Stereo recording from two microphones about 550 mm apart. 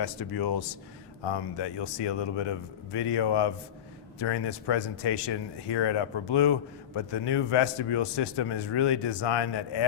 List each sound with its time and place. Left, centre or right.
0.0 s speech: left
2.0 s speech: left
2.5 s speech: left